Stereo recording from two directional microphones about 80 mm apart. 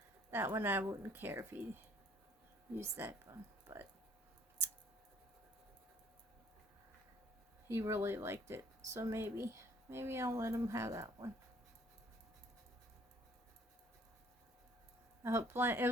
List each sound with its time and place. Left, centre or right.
0.3 s speech: right
7.7 s speech: right
15.2 s speech: right